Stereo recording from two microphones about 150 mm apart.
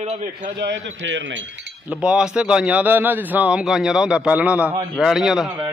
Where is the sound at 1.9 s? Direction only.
5° right (ahead or behind).